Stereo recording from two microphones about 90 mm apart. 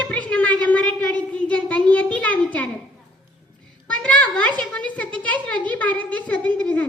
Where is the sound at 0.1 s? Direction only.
15° left (ahead or behind).